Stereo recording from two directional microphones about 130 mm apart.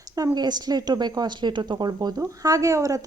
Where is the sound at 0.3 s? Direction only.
30° right (ahead or behind).